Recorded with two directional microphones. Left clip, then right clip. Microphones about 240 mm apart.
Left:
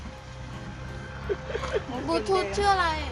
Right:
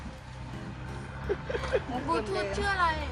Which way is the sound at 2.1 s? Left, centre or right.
Left.